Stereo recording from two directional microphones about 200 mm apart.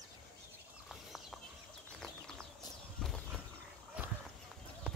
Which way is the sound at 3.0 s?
Centre (ahead or behind).